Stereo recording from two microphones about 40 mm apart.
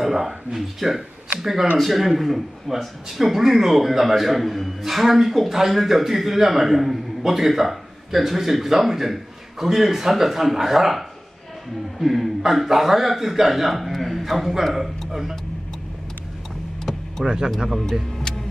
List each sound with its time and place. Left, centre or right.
0.0 s speech: centre
16.9 s vehicle: centre
17.2 s speech: centre